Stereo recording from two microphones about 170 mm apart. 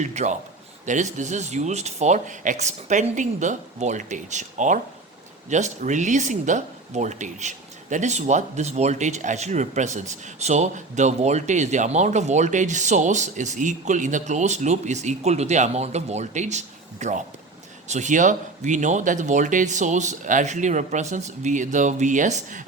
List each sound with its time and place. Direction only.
0.0 s speech: 45° right (ahead or behind)